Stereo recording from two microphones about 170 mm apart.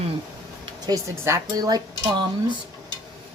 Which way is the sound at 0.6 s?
20° right (ahead or behind).